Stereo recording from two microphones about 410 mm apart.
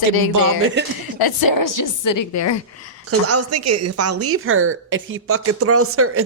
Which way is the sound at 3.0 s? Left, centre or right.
Right.